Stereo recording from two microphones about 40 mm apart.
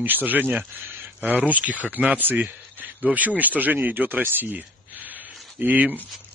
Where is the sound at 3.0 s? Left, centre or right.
Right.